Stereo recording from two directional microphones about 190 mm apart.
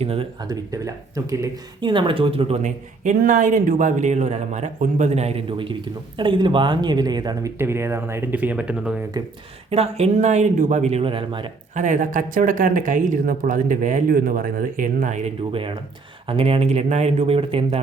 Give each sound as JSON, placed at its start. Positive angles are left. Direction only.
{"t": 0.0, "sound": "speech", "side_deg": -30}
{"t": 0.4, "sound": "speech", "side_deg": -20}
{"t": 9.6, "sound": "speech", "side_deg": -35}
{"t": 11.7, "sound": "speech", "side_deg": -40}